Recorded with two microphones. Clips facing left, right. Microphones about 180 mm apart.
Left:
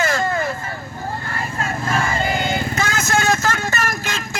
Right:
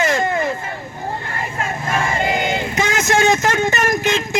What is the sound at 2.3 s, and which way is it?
Vehicle, 15° right (ahead or behind).